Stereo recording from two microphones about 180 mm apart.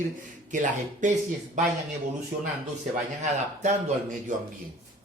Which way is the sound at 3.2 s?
40° right (ahead or behind).